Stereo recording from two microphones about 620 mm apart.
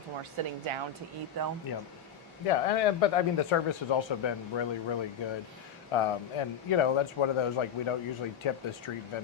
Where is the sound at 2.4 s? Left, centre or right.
Left.